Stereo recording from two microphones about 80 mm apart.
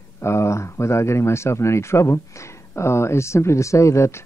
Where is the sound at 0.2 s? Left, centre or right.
Left.